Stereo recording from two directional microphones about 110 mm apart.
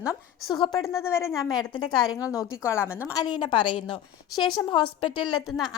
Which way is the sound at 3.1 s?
40° left (ahead or behind).